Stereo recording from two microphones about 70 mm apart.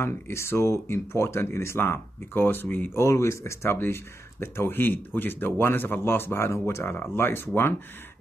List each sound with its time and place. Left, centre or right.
0.0 s speech: left
3.0 s speech: left